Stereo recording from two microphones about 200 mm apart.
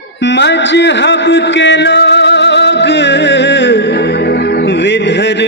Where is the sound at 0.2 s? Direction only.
60° left (ahead or behind).